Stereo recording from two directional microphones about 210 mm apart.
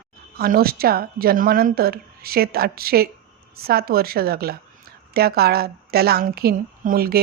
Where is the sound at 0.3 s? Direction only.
45° right (ahead or behind).